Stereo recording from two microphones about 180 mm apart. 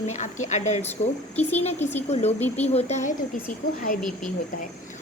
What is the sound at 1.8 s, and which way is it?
Speech, 10° left (ahead or behind).